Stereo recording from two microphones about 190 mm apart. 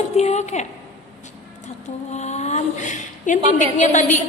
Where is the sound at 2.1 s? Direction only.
35° left (ahead or behind).